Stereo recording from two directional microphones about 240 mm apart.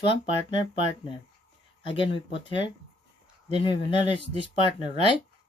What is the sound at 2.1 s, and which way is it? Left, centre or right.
Speech, left.